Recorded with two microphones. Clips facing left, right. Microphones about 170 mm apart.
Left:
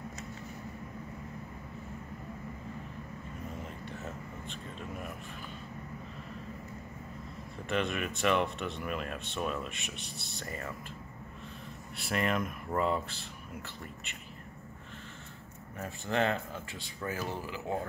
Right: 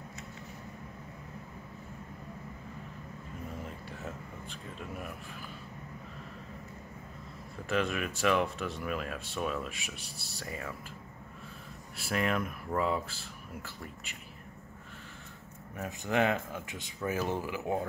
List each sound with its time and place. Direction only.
7.6 s speech: 5° right (ahead or behind)
12.0 s speech: centre (ahead or behind)
15.8 s speech: 10° right (ahead or behind)